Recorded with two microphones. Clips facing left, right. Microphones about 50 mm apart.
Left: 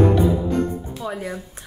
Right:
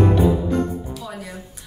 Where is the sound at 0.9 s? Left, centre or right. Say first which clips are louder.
Left 5 dB; left.